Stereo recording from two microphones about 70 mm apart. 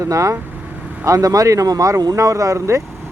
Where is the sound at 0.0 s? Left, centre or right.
Right.